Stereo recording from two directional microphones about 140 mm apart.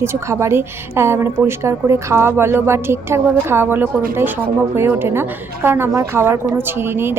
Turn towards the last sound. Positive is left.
turn(degrees=-15)  # may be behind; listen again after turning